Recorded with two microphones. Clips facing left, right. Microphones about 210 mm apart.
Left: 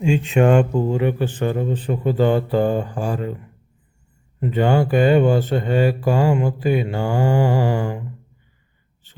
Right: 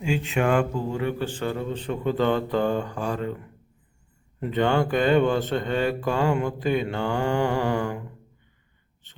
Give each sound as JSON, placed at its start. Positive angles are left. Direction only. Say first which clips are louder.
{"t": 0.0, "sound": "speech", "louder": "left 7 dB", "side_deg": 30}
{"t": 4.4, "sound": "speech", "louder": "left 4 dB", "side_deg": 10}